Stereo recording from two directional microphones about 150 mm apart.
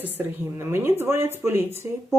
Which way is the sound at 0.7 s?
15° right (ahead or behind).